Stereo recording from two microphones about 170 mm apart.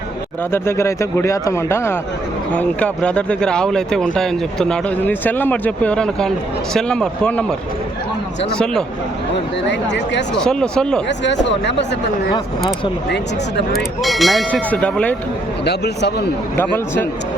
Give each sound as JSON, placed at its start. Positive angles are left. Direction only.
{"t": 0.5, "sound": "speech", "side_deg": 15}
{"t": 8.5, "sound": "speech", "side_deg": 5}
{"t": 9.6, "sound": "speech", "side_deg": 90}
{"t": 10.3, "sound": "speech", "side_deg": 5}
{"t": 11.4, "sound": "speech", "side_deg": 90}
{"t": 12.3, "sound": "speech", "side_deg": 30}
{"t": 14.0, "sound": "speech", "side_deg": 0}
{"t": 15.6, "sound": "speech", "side_deg": 80}
{"t": 16.6, "sound": "speech", "side_deg": 10}